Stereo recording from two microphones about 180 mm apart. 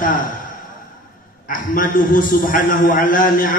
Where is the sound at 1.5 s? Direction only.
50° left (ahead or behind).